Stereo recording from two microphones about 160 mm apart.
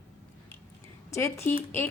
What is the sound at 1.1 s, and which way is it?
Speech, 15° left (ahead or behind).